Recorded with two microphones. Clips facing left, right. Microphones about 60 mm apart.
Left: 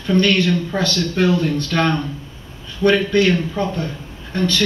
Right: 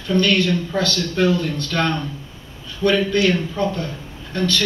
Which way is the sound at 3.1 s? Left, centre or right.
Left.